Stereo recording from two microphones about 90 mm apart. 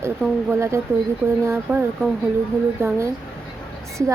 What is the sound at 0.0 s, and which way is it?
A woman's voice, 30° right (ahead or behind).